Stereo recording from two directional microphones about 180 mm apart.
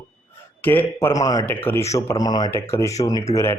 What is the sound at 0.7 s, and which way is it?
Speech, 10° left (ahead or behind).